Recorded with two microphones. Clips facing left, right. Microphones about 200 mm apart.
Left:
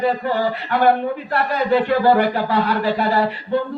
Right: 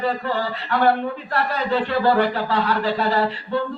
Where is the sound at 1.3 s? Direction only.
15° left (ahead or behind).